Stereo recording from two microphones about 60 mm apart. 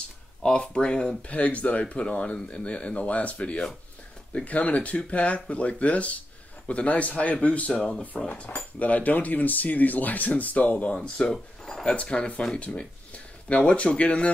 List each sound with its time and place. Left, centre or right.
0.4 s speech: centre
11.2 s speech: centre
11.8 s speech: centre